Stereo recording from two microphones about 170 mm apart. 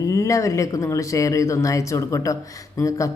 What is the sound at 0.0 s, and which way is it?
Speech, 20° left (ahead or behind).